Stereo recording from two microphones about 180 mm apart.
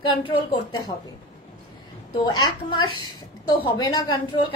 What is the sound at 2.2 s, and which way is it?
A woman's voice, 20° left (ahead or behind).